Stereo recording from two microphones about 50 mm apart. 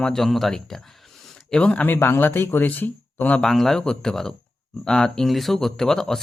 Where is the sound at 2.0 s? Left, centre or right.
Left.